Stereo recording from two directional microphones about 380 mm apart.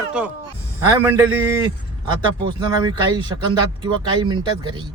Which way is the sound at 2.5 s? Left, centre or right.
Centre.